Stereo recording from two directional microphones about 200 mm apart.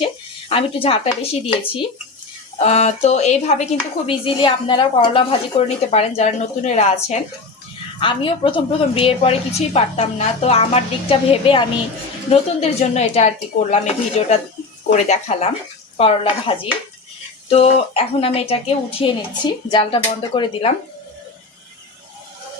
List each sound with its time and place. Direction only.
0.0 s a woman's voice: 25° left (ahead or behind)